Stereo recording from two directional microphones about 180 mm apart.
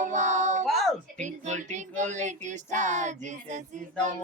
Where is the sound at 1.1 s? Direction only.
40° right (ahead or behind).